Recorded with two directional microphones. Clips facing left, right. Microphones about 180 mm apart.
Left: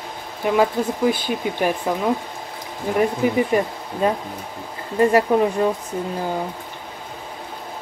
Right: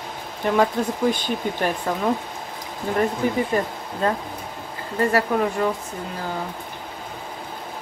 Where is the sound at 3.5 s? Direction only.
15° left (ahead or behind).